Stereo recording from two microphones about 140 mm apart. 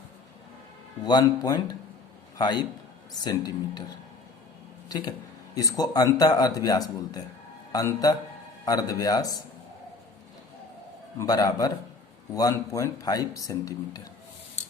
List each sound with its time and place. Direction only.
1.0 s a man's voice: 30° left (ahead or behind)
11.2 s speech: 25° left (ahead or behind)